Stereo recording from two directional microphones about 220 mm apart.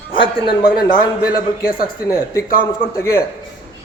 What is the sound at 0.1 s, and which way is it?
Speech, 25° left (ahead or behind).